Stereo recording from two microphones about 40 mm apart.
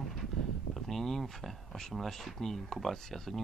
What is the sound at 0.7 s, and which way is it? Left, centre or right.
Speech, centre.